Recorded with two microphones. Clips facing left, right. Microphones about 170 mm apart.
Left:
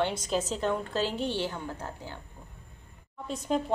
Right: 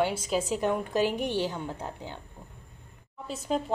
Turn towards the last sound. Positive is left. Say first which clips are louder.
# left 1 dB
turn(degrees=-5)  # may be behind; listen again after turning